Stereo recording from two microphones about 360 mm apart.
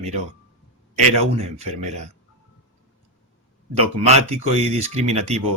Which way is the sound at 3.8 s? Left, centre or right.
Centre.